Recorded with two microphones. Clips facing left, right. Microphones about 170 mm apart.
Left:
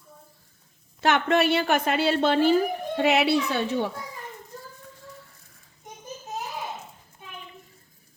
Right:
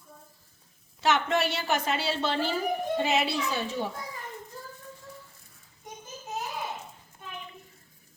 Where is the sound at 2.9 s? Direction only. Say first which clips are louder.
Left 8 dB; 70° left (ahead or behind).